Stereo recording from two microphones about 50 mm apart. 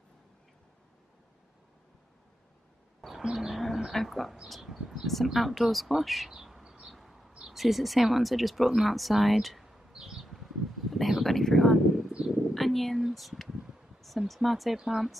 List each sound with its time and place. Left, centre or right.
3.0 s music: centre
3.3 s bird: centre
4.5 s speech: centre
6.3 s bird: centre
6.6 s a sound: centre
6.9 s a sound: centre
7.5 s speech: centre
12.1 s a sound: centre
12.5 s speech: centre